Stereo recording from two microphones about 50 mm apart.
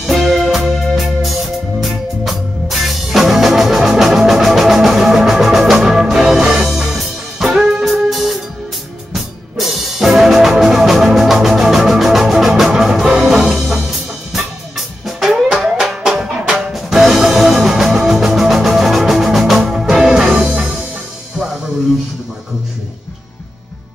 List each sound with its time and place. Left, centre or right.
0.0 s music: centre; by 20.8 s right